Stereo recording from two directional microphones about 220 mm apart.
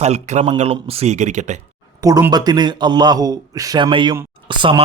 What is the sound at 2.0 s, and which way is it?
Speech, 15° right (ahead or behind).